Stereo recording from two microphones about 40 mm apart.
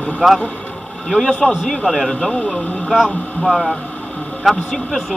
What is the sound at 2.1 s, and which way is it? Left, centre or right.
Speech, centre.